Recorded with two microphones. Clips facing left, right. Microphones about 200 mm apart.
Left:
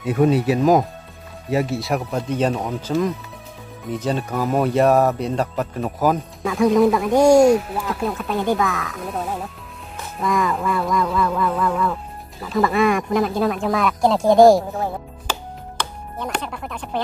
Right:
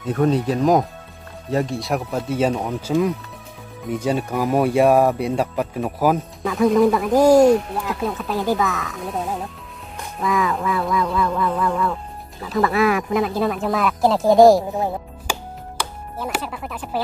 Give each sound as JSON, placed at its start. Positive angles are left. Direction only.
{"t": 0.0, "sound": "speech", "side_deg": 10}
{"t": 14.7, "sound": "speech", "side_deg": -15}
{"t": 15.8, "sound": "music", "side_deg": -5}